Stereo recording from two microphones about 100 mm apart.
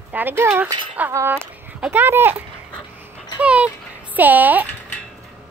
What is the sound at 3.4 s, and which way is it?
Speech, 15° right (ahead or behind).